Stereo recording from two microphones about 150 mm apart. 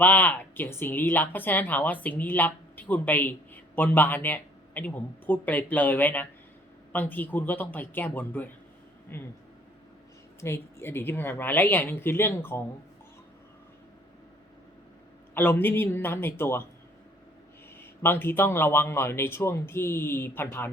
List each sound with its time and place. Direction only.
0.0 s speech: 10° left (ahead or behind)
10.4 s speech: 15° left (ahead or behind)
15.4 s speech: 15° left (ahead or behind)
17.7 s speech: 15° left (ahead or behind)